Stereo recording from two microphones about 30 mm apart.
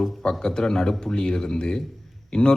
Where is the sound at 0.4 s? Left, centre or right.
Left.